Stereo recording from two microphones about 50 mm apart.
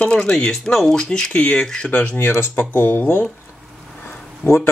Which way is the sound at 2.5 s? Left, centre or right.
Left.